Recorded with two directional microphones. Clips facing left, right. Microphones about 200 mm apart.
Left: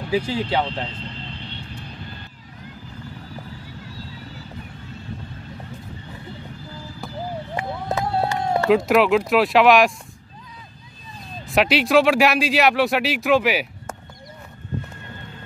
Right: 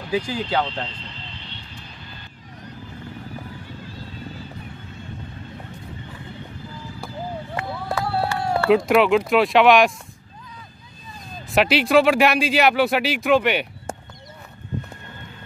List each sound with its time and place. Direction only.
0.1 s speech: 5° left (ahead or behind)
7.5 s run: 20° left (ahead or behind)
8.6 s speech: centre (ahead or behind)
11.4 s speech: centre (ahead or behind)